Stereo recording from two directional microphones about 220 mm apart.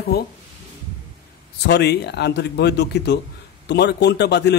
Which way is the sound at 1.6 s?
50° left (ahead or behind).